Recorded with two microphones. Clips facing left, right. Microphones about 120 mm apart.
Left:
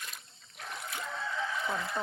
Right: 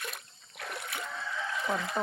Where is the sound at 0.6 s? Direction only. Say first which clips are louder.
Right 2 dB; 70° right (ahead or behind).